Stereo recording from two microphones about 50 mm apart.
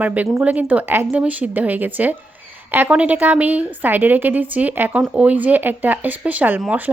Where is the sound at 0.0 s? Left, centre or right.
Right.